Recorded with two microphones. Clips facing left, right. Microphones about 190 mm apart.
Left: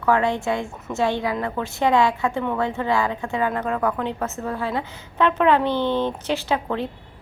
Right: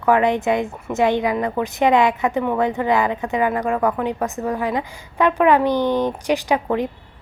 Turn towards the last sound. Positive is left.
turn(degrees=-15)  # may be behind; listen again after turning